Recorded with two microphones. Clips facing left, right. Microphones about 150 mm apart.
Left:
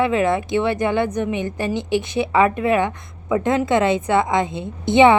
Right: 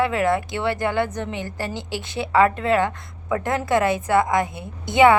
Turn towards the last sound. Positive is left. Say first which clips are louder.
# left 2 dB
turn(degrees=25)  # may be behind; listen again after turning